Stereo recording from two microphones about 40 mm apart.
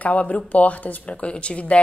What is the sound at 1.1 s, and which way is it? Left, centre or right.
Speech, left.